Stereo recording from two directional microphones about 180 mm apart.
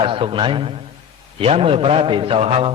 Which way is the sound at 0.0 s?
30° right (ahead or behind).